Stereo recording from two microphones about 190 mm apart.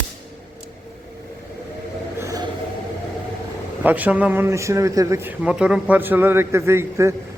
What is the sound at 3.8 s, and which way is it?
A man's voice, 10° right (ahead or behind).